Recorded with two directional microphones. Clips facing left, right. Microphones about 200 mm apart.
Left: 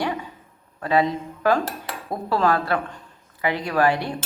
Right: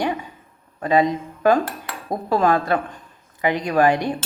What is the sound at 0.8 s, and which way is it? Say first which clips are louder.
A woman's voice: right 3 dB; 15° right (ahead or behind).